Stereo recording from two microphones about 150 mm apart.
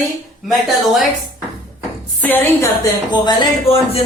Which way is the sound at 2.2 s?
10° left (ahead or behind).